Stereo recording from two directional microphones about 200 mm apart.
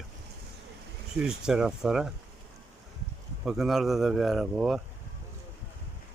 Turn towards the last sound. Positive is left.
turn(degrees=0)  # may be behind; listen again after turning